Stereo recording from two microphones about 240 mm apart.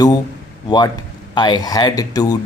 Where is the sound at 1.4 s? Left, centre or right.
Centre.